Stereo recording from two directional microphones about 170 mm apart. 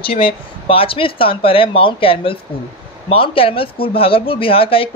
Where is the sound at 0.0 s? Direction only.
30° left (ahead or behind).